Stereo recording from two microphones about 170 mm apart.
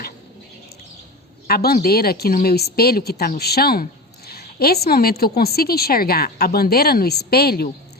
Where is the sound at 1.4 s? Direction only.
65° left (ahead or behind).